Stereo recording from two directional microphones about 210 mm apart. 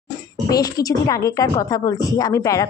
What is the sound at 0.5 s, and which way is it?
A woman's voice, 15° left (ahead or behind).